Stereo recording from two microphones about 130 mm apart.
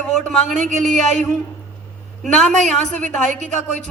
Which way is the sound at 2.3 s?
5° left (ahead or behind).